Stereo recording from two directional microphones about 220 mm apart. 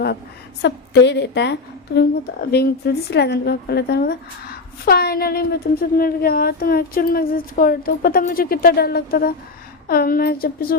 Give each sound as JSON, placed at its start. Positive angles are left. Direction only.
{"t": 0.6, "sound": "speech", "side_deg": 50}